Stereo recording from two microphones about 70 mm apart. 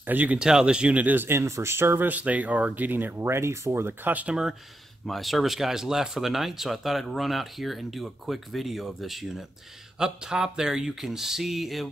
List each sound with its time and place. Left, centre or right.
0.0 s speech: right
0.4 s speech: centre
5.0 s speech: centre